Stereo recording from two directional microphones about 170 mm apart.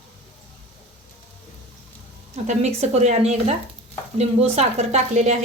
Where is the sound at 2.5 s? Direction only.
40° right (ahead or behind).